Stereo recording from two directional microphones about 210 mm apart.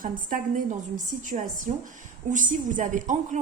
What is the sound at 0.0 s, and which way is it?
A woman's voice, 40° right (ahead or behind).